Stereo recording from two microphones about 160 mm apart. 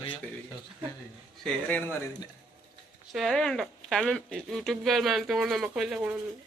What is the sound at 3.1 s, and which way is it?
Speech, centre (ahead or behind).